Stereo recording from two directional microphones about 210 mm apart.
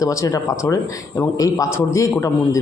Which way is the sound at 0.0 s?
15° left (ahead or behind).